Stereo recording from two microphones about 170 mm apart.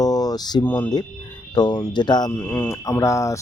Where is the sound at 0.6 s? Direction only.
10° left (ahead or behind).